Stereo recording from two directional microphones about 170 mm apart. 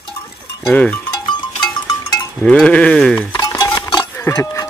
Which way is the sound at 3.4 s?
25° left (ahead or behind).